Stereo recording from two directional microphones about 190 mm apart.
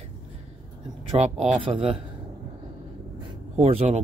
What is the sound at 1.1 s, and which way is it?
Speech, 35° right (ahead or behind).